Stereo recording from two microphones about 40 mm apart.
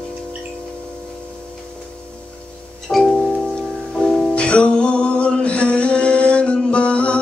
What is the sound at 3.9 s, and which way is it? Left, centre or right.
Music, centre.